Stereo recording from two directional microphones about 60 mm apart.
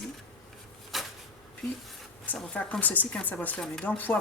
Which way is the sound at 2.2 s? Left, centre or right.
Left.